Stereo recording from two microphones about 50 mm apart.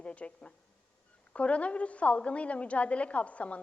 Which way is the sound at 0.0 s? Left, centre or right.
Left.